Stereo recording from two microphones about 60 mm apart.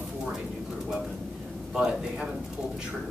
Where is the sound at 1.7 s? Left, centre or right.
Centre.